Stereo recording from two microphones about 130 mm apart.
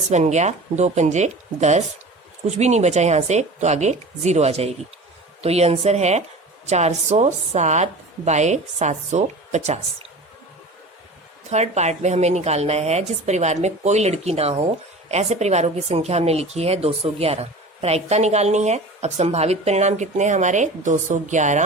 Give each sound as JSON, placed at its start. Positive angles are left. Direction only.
{"t": 0.1, "sound": "speech", "side_deg": -60}
{"t": 11.4, "sound": "speech", "side_deg": -60}